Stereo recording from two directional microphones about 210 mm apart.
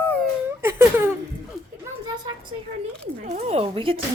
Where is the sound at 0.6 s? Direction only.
10° right (ahead or behind).